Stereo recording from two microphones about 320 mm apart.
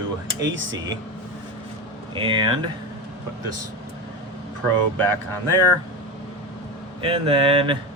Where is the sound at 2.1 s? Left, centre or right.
Centre.